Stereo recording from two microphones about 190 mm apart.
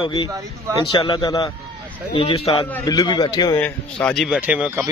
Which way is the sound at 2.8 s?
20° left (ahead or behind).